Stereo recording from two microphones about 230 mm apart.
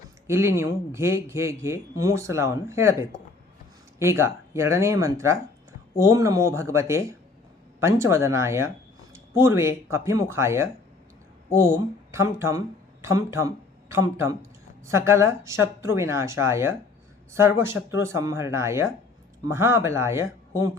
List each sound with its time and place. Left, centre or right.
0.3 s speech: centre
3.9 s speech: centre